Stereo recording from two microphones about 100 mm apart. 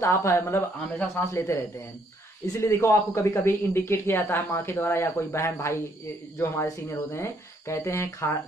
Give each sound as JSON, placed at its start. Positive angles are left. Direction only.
{"t": 0.0, "sound": "speech", "side_deg": 25}